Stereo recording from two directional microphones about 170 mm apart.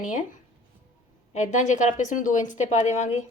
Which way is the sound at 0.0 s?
50° left (ahead or behind).